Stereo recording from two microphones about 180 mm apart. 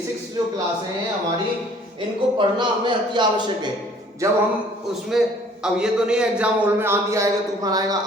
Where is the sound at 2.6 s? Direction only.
25° right (ahead or behind).